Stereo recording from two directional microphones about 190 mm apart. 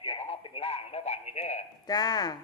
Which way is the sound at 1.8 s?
20° left (ahead or behind).